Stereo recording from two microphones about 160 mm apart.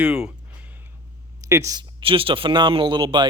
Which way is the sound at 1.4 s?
20° right (ahead or behind).